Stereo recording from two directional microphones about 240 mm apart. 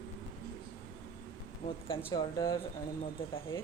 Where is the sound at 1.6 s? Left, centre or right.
Left.